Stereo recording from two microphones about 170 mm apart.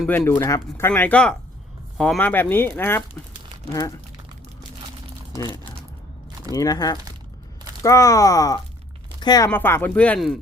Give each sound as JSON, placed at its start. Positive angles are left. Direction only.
{"t": 0.1, "sound": "speech", "side_deg": 10}
{"t": 6.5, "sound": "speech", "side_deg": 20}
{"t": 9.5, "sound": "speech", "side_deg": 15}